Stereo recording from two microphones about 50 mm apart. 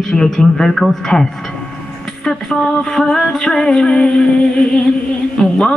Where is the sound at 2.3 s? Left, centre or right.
Centre.